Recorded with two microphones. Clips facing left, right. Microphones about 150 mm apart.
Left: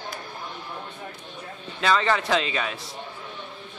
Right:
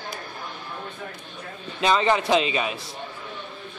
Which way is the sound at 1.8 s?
20° right (ahead or behind).